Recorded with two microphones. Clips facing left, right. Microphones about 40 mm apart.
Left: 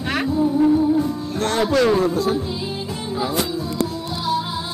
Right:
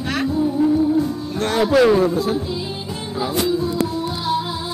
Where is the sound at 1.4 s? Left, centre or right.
Centre.